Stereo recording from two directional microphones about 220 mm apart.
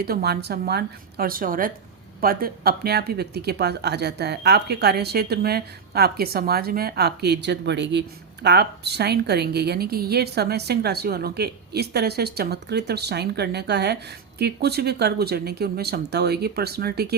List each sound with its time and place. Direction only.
0.0 s speech: 45° right (ahead or behind)